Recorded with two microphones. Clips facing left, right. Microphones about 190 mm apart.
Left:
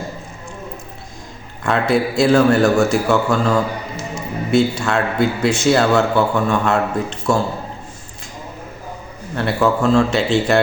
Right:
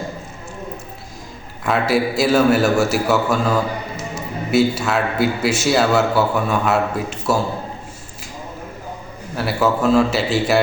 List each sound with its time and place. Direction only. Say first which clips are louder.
1.6 s a man's voice: left 1 dB; 5° right (ahead or behind)
9.3 s a man's voice: left 2 dB; 5° right (ahead or behind)